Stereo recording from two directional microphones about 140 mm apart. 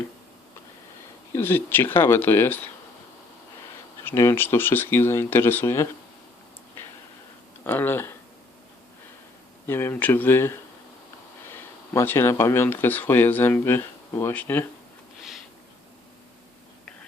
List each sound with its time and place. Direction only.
1.3 s speech: 15° left (ahead or behind)
4.0 s speech: 20° left (ahead or behind)
7.6 s speech: 15° left (ahead or behind)
9.6 s speech: 15° left (ahead or behind)